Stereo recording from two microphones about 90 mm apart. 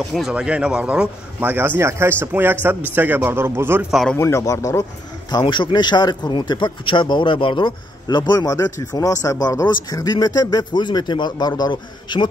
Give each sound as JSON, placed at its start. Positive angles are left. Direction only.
{"t": 0.3, "sound": "speech", "side_deg": -10}
{"t": 1.8, "sound": "a man's voice", "side_deg": -30}
{"t": 4.2, "sound": "speech", "side_deg": 35}
{"t": 5.4, "sound": "speech", "side_deg": 60}